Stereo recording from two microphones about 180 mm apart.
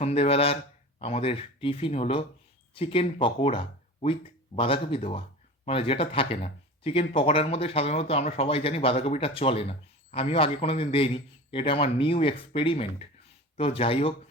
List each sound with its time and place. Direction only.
0.0 s speech: 35° left (ahead or behind)